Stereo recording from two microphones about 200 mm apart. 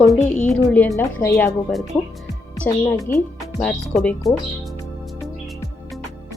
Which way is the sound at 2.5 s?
10° left (ahead or behind).